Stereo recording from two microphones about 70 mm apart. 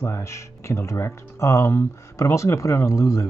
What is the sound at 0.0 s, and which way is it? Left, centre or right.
Speech, left.